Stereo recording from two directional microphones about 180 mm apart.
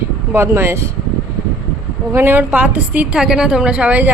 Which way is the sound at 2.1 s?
15° right (ahead or behind).